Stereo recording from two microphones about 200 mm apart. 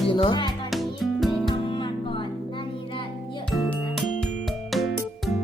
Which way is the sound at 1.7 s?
25° left (ahead or behind).